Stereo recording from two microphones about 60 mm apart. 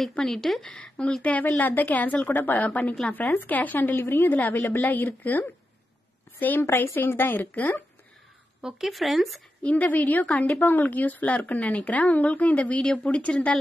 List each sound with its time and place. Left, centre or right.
0.2 s speech: centre
1.2 s a woman's voice: left
6.6 s a woman's voice: left
8.5 s speech: centre
9.6 s a woman's voice: left
10.5 s a woman's voice: left; by 13.6 s centre